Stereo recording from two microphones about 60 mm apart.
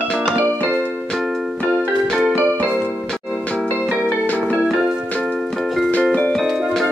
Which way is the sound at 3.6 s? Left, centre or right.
Right.